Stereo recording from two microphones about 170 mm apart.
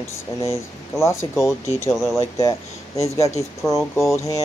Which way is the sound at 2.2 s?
20° left (ahead or behind).